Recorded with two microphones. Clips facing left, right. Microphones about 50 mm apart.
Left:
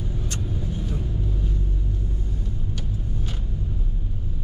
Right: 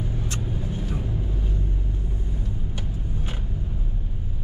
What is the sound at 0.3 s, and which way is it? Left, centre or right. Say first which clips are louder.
Vehicle: even; centre.